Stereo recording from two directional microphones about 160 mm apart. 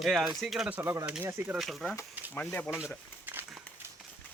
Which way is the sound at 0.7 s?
20° right (ahead or behind).